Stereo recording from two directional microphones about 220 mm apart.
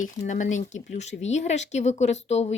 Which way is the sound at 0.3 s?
35° left (ahead or behind).